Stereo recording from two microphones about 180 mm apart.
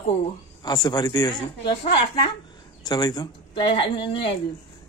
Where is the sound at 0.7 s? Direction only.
20° left (ahead or behind).